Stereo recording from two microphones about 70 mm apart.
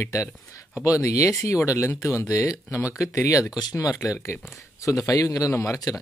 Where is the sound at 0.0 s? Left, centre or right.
Left.